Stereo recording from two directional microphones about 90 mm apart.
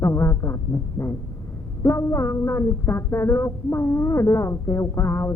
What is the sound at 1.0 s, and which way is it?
A man's voice, 30° left (ahead or behind).